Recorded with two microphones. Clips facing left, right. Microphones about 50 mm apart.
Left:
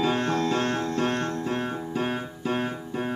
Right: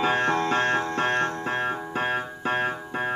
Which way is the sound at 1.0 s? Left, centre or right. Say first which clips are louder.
Right 2 dB; right.